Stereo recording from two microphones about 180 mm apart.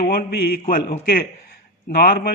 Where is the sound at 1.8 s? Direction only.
55° left (ahead or behind).